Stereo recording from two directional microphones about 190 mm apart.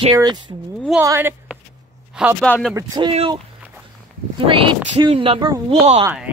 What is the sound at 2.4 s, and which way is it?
Speech, 5° left (ahead or behind).